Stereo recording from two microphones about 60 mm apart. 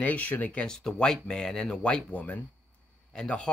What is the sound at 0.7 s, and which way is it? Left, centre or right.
Speech, centre.